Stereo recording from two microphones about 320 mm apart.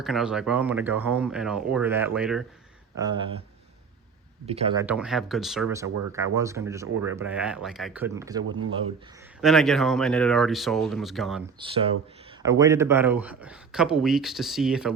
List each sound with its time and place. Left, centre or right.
0.0 s speech: centre
4.4 s speech: centre
9.4 s speech: centre
11.6 s speech: centre